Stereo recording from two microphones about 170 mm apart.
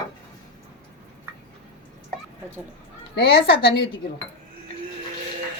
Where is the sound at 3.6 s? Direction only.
80° left.